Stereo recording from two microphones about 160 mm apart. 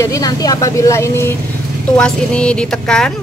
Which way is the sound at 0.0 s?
20° left (ahead or behind).